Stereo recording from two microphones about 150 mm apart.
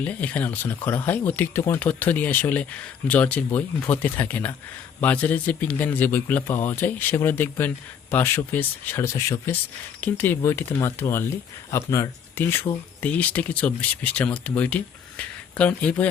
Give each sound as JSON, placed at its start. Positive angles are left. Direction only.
{"t": 0.0, "sound": "speech", "side_deg": 10}